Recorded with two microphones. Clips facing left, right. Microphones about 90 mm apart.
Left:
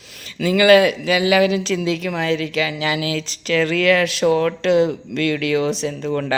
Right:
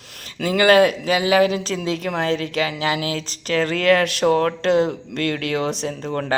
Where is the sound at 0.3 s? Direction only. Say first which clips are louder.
Left 2 dB; 45° right (ahead or behind).